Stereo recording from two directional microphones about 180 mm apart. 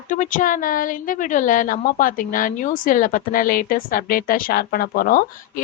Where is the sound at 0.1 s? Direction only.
45° left (ahead or behind).